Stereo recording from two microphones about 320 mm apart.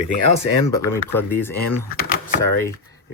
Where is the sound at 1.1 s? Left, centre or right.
Centre.